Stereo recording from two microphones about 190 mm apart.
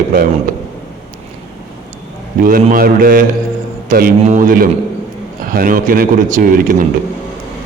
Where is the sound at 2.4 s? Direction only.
50° right (ahead or behind).